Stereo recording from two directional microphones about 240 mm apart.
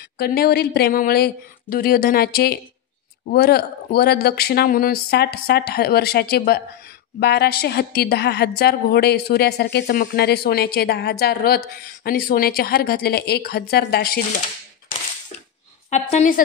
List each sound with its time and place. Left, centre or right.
0.2 s a woman's voice: left
15.9 s a woman's voice: left